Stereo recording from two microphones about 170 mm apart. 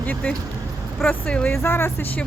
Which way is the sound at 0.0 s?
10° left (ahead or behind).